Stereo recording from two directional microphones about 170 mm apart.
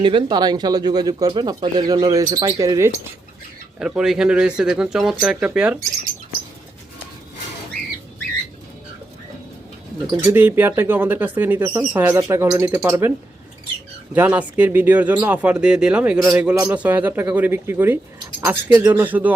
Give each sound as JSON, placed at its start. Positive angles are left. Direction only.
{"t": 0.0, "sound": "speech", "side_deg": -30}
{"t": 3.8, "sound": "speech", "side_deg": -5}
{"t": 10.2, "sound": "speech", "side_deg": -10}